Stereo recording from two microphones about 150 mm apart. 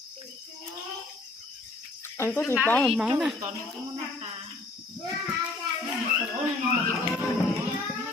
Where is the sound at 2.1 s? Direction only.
15° left (ahead or behind).